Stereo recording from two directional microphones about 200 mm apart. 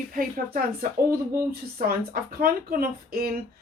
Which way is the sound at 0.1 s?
45° right (ahead or behind).